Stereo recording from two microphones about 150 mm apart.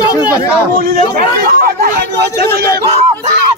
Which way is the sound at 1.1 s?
70° right (ahead or behind).